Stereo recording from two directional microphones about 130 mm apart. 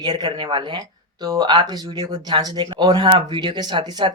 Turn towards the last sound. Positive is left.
turn(degrees=-35)  # may be behind; listen again after turning